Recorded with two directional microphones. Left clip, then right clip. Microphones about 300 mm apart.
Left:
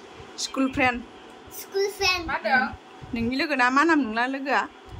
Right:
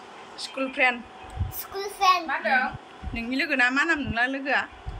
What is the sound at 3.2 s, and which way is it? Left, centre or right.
A woman's voice, centre.